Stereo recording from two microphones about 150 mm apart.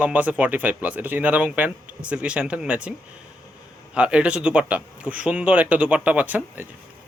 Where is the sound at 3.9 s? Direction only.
5° right (ahead or behind).